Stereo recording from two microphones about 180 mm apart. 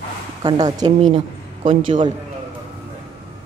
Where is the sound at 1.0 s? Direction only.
30° right (ahead or behind).